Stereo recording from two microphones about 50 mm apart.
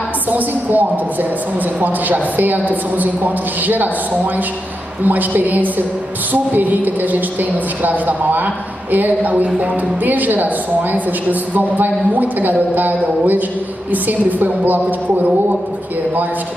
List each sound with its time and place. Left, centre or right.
0.3 s a woman's voice: right